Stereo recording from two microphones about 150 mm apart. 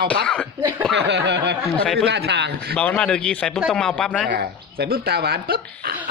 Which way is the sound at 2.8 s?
5° left (ahead or behind).